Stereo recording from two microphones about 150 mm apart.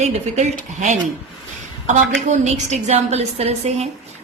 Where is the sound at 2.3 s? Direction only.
50° right (ahead or behind).